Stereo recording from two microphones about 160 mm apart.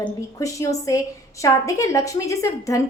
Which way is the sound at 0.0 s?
20° left (ahead or behind).